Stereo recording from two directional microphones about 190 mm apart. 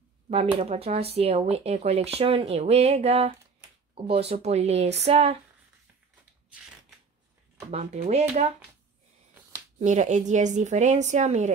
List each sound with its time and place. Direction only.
0.6 s speech: 35° right (ahead or behind)
7.7 s speech: 35° right (ahead or behind)
9.8 s speech: 40° right (ahead or behind)